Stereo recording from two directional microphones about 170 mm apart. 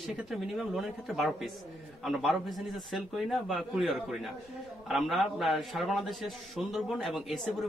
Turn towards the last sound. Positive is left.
turn(degrees=0)  # may be behind; listen again after turning